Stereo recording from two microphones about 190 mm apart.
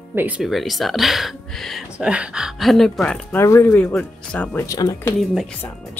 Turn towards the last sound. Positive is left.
turn(degrees=5)  # may be behind; listen again after turning